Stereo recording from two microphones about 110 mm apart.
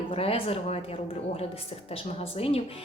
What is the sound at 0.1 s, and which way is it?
Speech, 60° left (ahead or behind).